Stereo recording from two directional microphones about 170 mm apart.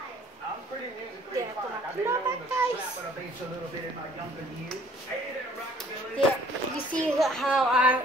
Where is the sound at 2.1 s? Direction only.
15° right (ahead or behind).